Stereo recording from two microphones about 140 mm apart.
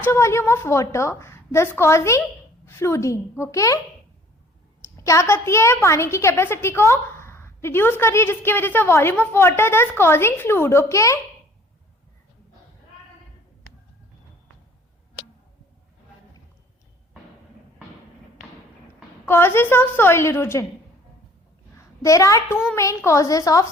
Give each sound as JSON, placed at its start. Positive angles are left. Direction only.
{"t": 0.0, "sound": "a woman's voice", "side_deg": 20}
{"t": 4.8, "sound": "a woman's voice", "side_deg": 20}
{"t": 19.2, "sound": "a woman's voice", "side_deg": 15}
{"t": 22.0, "sound": "a woman's voice", "side_deg": 25}